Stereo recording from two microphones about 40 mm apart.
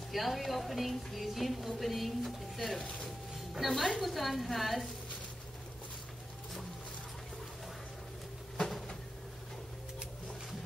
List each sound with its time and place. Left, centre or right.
0.1 s speech: centre